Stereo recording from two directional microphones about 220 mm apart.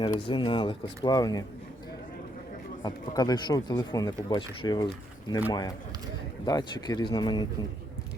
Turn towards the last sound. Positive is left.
turn(degrees=20)  # may be behind; listen again after turning